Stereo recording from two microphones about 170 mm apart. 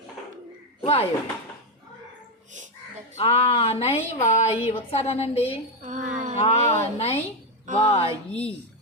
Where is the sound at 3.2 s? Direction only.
35° left (ahead or behind).